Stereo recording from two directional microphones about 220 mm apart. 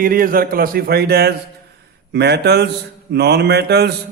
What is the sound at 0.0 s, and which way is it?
A man's voice, 40° right (ahead or behind).